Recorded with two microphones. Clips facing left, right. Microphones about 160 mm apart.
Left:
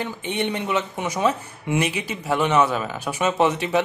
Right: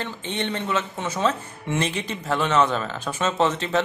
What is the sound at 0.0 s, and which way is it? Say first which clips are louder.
Speech: left 3 dB; 10° left (ahead or behind).